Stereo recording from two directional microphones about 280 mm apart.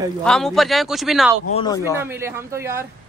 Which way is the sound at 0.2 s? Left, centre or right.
Centre.